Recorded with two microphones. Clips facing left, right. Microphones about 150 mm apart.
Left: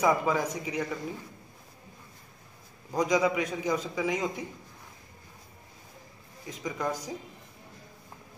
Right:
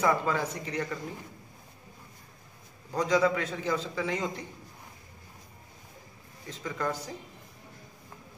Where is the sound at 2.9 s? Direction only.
10° left (ahead or behind).